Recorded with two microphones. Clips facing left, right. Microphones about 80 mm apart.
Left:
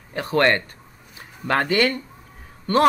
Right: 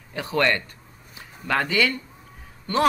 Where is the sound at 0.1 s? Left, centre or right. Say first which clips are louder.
Left 4 dB; left.